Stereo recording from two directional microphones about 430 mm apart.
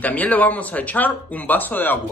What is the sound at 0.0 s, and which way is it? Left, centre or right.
Speech, centre.